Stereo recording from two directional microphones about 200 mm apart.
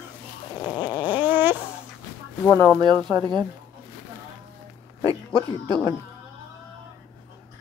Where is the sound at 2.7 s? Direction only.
20° right (ahead or behind).